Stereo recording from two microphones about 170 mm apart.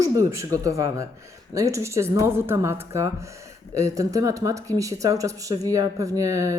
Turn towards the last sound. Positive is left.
turn(degrees=-20)  # may be behind; listen again after turning